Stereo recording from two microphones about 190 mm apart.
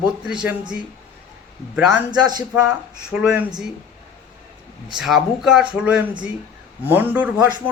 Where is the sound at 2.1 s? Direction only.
20° right (ahead or behind).